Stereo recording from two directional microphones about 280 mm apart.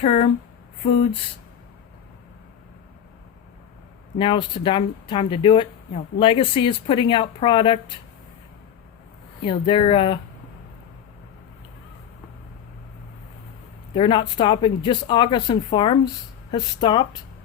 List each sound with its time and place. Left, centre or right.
0.0 s speech: centre
4.2 s speech: centre
9.4 s speech: centre
13.9 s speech: centre